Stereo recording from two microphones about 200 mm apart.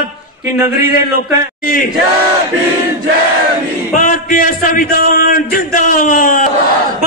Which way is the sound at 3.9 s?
40° left (ahead or behind).